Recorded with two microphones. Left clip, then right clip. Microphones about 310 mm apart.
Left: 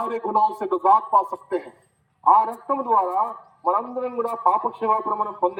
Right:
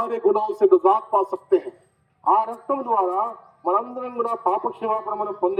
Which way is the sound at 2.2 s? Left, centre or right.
Centre.